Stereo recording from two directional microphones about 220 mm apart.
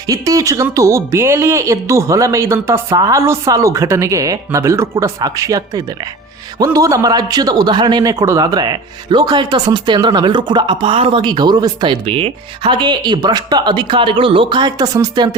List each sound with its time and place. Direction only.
0.1 s a man's voice: 15° right (ahead or behind)